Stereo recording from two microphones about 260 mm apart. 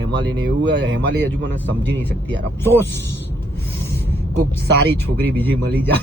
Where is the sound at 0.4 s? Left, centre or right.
Right.